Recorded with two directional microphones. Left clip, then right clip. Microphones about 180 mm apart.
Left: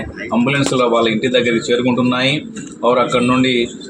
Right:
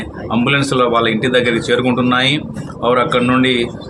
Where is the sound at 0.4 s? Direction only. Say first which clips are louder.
Right 2 dB; 15° right (ahead or behind).